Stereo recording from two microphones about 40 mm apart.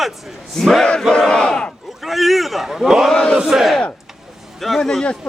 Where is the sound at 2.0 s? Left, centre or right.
Centre.